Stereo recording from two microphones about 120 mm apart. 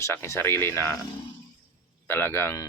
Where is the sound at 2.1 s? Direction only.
20° left (ahead or behind).